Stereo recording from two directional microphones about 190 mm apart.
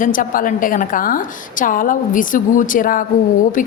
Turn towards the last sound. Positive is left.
turn(degrees=45)  # may be behind; listen again after turning